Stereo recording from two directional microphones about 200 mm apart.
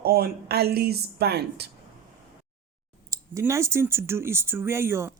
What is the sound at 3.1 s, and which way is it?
Speech, 15° right (ahead or behind).